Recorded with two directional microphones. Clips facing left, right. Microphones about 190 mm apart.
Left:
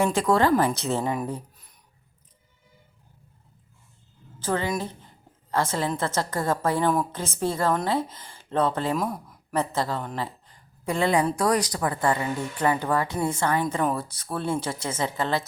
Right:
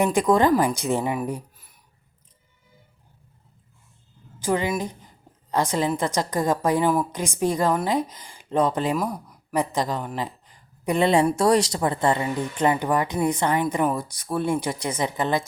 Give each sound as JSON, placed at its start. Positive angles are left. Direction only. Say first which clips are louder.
{"t": 0.0, "sound": "speech", "louder": "right 2 dB", "side_deg": -15}
{"t": 4.4, "sound": "a woman's voice", "louder": "right 3 dB", "side_deg": -15}
{"t": 9.0, "sound": "speech", "louder": "right 1 dB", "side_deg": 0}
{"t": 9.5, "sound": "speech", "louder": "right 2 dB", "side_deg": -15}
{"t": 10.2, "sound": "a sound", "louder": "right 2 dB", "side_deg": -15}
{"t": 11.3, "sound": "speech", "louder": "right 4 dB", "side_deg": -25}